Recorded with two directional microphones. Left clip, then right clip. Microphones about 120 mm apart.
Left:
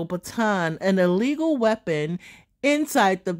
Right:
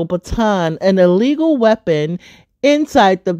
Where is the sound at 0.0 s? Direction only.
15° right (ahead or behind).